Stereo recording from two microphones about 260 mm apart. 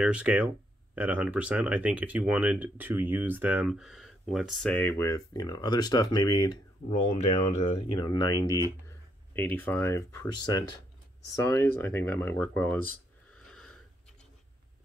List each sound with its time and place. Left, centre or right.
0.0 s speech: centre
9.3 s speech: centre
13.3 s sniff: centre